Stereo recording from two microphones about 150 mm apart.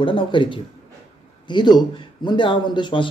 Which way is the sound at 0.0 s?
35° left (ahead or behind).